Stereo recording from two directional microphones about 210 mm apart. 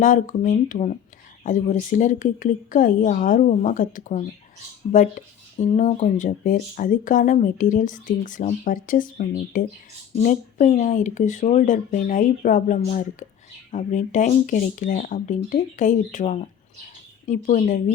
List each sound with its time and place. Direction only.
0.0 s speech: 35° left (ahead or behind)